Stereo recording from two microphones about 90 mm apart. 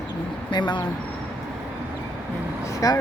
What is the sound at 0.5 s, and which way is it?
Speech, 55° left (ahead or behind).